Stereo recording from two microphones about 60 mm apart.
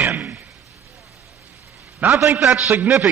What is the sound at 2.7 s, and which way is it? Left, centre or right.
Speech, right.